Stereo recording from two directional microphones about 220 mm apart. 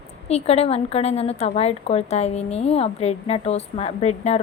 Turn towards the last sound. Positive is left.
turn(degrees=30)  # may be behind; listen again after turning